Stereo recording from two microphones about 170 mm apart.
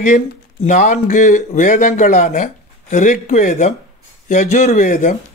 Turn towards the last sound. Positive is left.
turn(degrees=50)  # may be behind; listen again after turning